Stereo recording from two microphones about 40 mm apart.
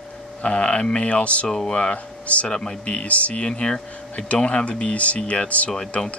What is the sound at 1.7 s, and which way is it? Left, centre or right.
Speech, left.